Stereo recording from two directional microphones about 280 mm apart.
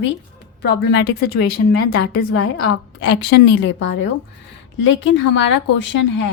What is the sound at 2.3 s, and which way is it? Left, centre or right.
Speech, left.